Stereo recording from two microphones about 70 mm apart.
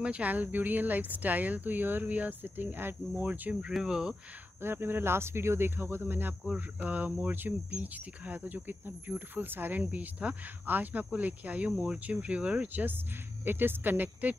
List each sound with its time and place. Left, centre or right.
0.0 s speech: centre
3.7 s speech: centre
4.6 s speech: right